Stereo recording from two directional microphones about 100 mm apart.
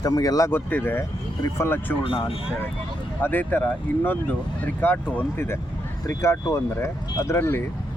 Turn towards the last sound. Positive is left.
turn(degrees=25)  # may be behind; listen again after turning